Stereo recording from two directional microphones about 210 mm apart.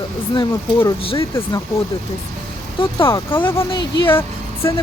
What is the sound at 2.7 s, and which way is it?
Speech, 25° left (ahead or behind).